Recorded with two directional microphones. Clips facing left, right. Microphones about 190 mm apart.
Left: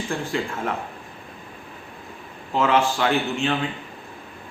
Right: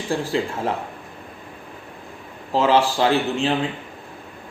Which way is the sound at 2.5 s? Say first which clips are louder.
Right 2 dB; 30° right (ahead or behind).